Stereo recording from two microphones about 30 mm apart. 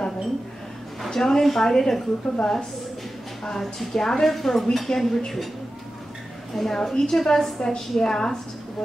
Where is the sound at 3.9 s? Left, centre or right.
Centre.